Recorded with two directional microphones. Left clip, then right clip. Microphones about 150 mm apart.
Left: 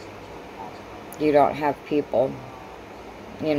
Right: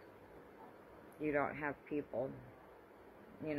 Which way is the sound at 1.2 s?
25° right (ahead or behind).